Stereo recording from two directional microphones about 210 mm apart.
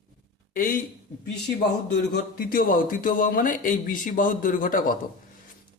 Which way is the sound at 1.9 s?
50° left (ahead or behind).